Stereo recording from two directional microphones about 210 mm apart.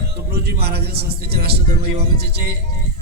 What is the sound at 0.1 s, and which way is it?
A man's voice, 50° right (ahead or behind).